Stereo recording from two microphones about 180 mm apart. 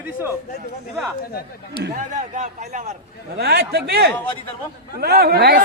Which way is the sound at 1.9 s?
40° right (ahead or behind).